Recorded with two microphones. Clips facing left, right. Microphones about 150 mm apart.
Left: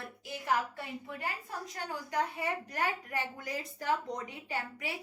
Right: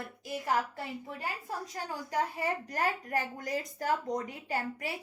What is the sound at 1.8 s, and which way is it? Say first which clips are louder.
A woman's voice: even; 35° right (ahead or behind).